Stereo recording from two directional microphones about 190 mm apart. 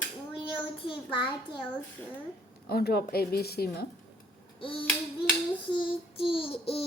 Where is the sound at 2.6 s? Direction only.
55° left (ahead or behind).